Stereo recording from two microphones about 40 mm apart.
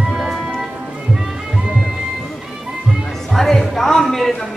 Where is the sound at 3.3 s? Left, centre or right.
Centre.